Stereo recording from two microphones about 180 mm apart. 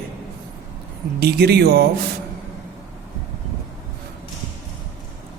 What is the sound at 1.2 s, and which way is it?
Speech, 60° right (ahead or behind).